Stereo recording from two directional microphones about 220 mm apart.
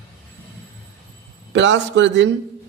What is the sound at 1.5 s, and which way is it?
Speech, 55° right (ahead or behind).